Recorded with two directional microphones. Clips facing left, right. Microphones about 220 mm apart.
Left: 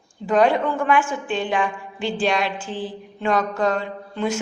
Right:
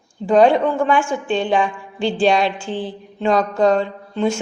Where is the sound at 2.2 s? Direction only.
30° right (ahead or behind).